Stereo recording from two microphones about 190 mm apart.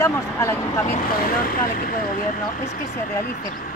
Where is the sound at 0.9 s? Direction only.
50° left (ahead or behind).